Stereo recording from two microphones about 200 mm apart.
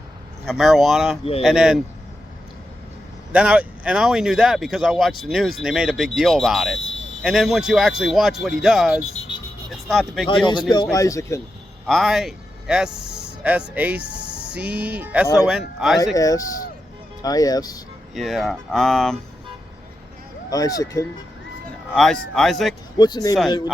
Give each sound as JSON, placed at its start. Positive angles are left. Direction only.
{"t": 0.4, "sound": "speech", "side_deg": 0}
{"t": 3.3, "sound": "speech", "side_deg": -5}
{"t": 6.7, "sound": "a sound", "side_deg": 70}
{"t": 7.2, "sound": "speech", "side_deg": 0}
{"t": 10.2, "sound": "speech", "side_deg": 25}
{"t": 11.9, "sound": "speech", "side_deg": 0}
{"t": 16.1, "sound": "speech", "side_deg": 15}
{"t": 18.1, "sound": "speech", "side_deg": 0}
{"t": 20.5, "sound": "speech", "side_deg": 15}
{"t": 21.9, "sound": "speech", "side_deg": 0}
{"t": 23.0, "sound": "speech", "side_deg": 20}